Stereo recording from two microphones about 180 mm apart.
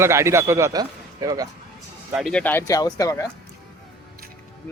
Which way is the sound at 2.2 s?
Centre (ahead or behind).